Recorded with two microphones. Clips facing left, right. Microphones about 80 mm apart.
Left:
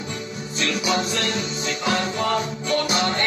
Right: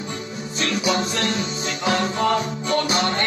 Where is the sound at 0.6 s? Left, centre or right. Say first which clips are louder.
Right 1 dB; right.